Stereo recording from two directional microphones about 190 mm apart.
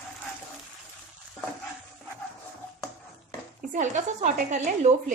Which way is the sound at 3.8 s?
40° right (ahead or behind).